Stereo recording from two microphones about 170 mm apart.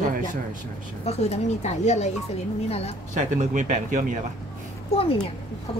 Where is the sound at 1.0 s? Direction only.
40° left (ahead or behind).